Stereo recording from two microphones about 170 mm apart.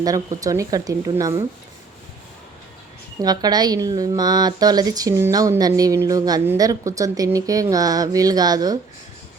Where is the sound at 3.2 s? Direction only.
25° right (ahead or behind).